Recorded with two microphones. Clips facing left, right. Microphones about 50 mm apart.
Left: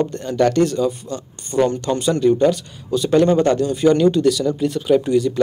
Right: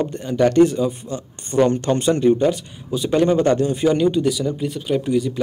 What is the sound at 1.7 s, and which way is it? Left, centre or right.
Speech, right.